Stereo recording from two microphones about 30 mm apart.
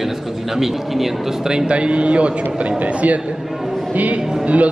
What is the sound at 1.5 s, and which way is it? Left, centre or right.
Speech, right.